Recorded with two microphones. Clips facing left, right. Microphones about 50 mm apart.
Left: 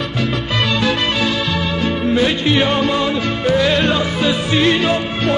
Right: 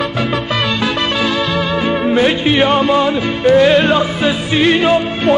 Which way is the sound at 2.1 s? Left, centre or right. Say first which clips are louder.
Right 3 dB; right.